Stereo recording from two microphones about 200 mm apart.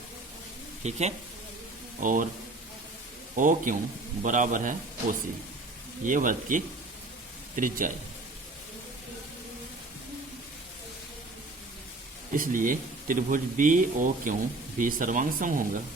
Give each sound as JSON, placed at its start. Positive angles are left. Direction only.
{"t": 0.9, "sound": "a man's voice", "side_deg": -35}
{"t": 3.3, "sound": "a man's voice", "side_deg": -40}
{"t": 12.3, "sound": "speech", "side_deg": -40}